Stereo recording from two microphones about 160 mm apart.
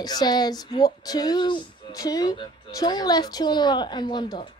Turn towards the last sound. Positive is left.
turn(degrees=30)  # may be behind; listen again after turning